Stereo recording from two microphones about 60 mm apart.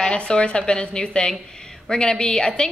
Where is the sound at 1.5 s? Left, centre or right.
Centre.